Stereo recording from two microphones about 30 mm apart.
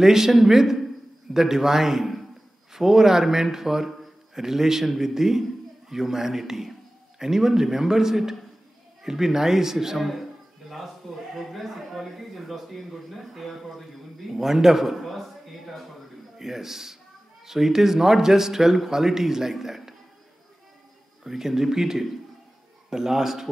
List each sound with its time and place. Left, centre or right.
0.0 s a man's voice: centre
11.3 s a man's voice: centre
14.3 s a man's voice: centre
15.0 s a sound: centre
16.3 s a man's voice: centre
21.2 s a man's voice: centre